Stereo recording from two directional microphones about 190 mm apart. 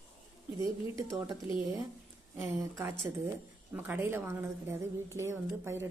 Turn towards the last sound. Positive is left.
turn(degrees=-15)  # may be behind; listen again after turning